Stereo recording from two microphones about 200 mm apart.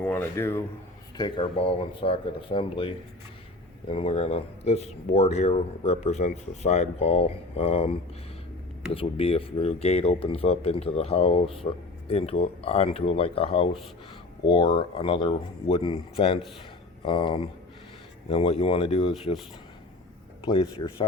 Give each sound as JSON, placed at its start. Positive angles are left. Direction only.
{"t": 0.0, "sound": "speech", "side_deg": 10}
{"t": 1.1, "sound": "speech", "side_deg": 25}
{"t": 20.4, "sound": "speech", "side_deg": 25}